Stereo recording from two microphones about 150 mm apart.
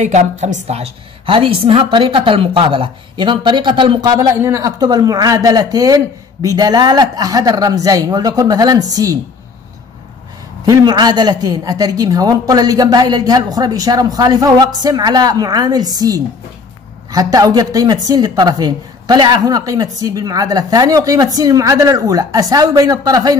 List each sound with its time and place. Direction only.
0.0 s a woman's voice: 50° right (ahead or behind); by 9.2 s 25° right (ahead or behind)
10.6 s a woman's voice: 25° right (ahead or behind)